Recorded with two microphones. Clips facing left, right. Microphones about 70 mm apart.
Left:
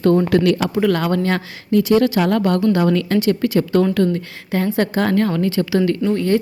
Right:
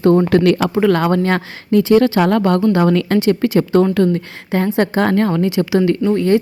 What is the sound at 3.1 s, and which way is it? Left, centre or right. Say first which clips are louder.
Speech: right 2 dB; right.